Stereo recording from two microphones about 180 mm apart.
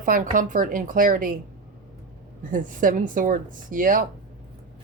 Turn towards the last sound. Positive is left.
turn(degrees=-50)  # may be behind; listen again after turning